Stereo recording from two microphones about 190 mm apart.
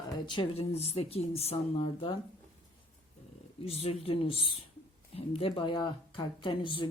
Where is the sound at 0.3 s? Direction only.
25° left (ahead or behind).